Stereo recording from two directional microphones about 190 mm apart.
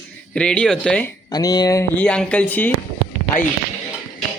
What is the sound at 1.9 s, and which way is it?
Speech, 5° left (ahead or behind).